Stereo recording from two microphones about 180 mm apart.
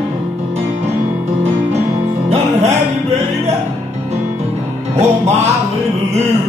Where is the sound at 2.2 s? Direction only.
35° right (ahead or behind).